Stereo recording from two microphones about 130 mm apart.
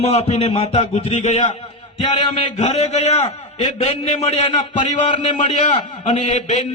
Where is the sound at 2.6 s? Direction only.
60° left (ahead or behind).